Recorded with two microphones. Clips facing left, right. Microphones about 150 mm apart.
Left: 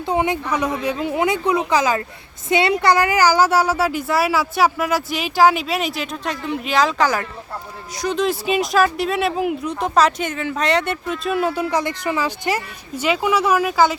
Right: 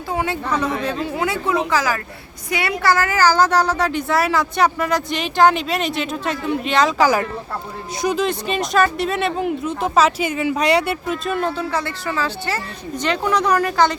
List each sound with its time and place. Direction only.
0.1 s speech: 20° left (ahead or behind); by 7.1 s centre (ahead or behind)
8.2 s speech: 5° left (ahead or behind)